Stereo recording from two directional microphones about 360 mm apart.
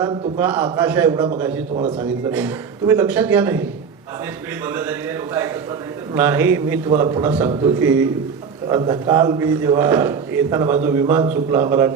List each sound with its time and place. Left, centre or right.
0.0 s a man's voice: centre